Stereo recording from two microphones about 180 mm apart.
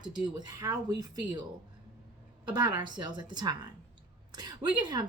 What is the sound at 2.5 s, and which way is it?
Speech, 25° right (ahead or behind).